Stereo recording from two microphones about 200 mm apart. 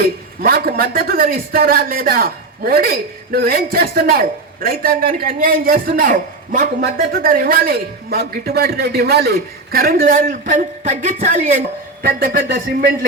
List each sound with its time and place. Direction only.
0.0 s a man's voice: 50° right (ahead or behind)